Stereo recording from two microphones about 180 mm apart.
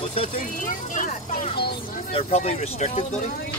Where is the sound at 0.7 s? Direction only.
45° left (ahead or behind).